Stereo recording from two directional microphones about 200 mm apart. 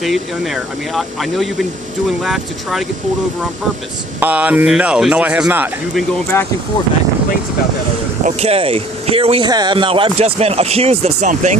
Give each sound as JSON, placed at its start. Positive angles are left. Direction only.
{"t": 0.0, "sound": "speech", "side_deg": 0}
{"t": 4.2, "sound": "speech", "side_deg": -5}
{"t": 6.3, "sound": "speech", "side_deg": 15}
{"t": 8.2, "sound": "speech", "side_deg": -30}